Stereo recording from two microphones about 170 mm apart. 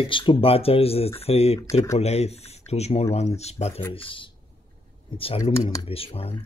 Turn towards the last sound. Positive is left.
turn(degrees=35)  # may be behind; listen again after turning